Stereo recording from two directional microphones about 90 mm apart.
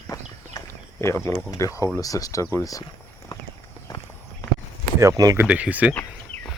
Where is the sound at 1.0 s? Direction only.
30° left (ahead or behind).